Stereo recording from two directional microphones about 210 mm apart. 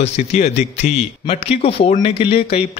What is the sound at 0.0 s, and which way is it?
A man's voice, 30° left (ahead or behind).